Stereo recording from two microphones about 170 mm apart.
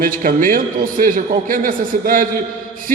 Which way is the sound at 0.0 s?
55° right (ahead or behind).